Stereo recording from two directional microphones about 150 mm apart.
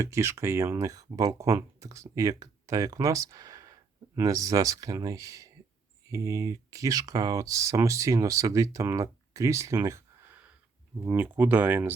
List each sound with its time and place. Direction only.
0.0 s speech: 20° right (ahead or behind)